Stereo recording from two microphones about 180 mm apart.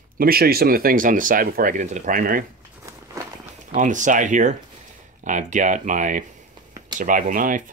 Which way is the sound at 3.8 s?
45° right (ahead or behind).